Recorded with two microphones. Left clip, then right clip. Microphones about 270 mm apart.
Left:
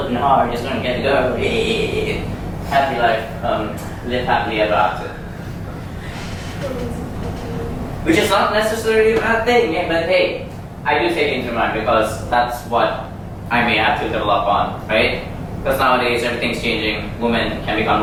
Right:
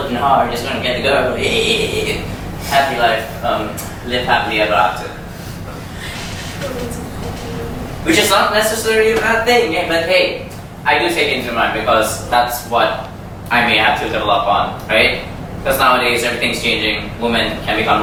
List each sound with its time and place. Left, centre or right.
0.3 s a man's voice: centre
2.6 s a man's voice: centre
8.0 s a man's voice: centre
14.3 s a man's voice: left
14.8 s a man's voice: centre